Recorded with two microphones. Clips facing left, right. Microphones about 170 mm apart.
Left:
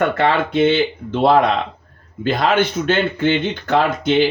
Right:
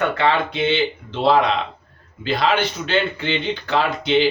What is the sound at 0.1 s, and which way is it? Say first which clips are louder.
Speech: left 3 dB; 45° left (ahead or behind).